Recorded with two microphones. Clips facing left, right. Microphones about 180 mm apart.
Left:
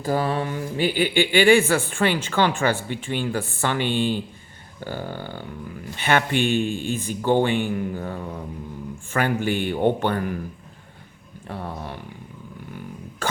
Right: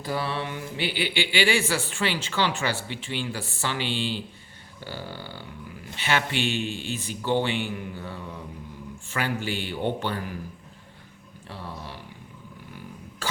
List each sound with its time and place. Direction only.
0.0 s speech: 45° left (ahead or behind)
11.4 s speech: 55° left (ahead or behind)
12.7 s a sound: 55° left (ahead or behind)